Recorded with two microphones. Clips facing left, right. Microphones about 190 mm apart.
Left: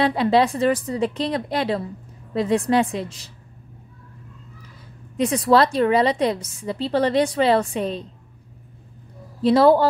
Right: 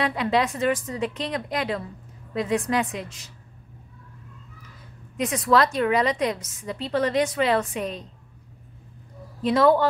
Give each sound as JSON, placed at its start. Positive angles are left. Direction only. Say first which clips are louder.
{"t": 0.0, "sound": "a woman's voice", "louder": "left 5 dB", "side_deg": 30}
{"t": 5.1, "sound": "a woman's voice", "louder": "left 4 dB", "side_deg": 30}
{"t": 9.4, "sound": "a woman's voice", "louder": "left 4 dB", "side_deg": 35}